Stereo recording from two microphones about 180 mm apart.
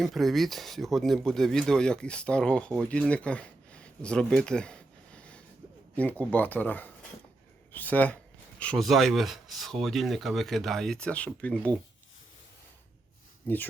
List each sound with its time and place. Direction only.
0.0 s speech: centre (ahead or behind)